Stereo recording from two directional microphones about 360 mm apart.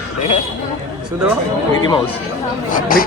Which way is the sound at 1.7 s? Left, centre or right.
Centre.